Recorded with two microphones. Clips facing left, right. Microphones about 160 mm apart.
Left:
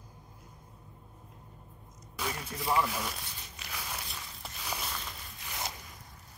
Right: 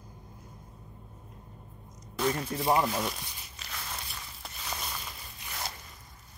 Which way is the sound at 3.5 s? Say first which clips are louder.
Even; 10° left (ahead or behind).